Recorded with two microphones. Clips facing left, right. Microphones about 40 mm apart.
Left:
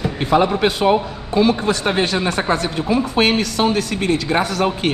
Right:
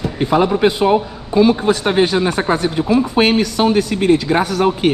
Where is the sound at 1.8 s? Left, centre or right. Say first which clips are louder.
Right 5 dB; left.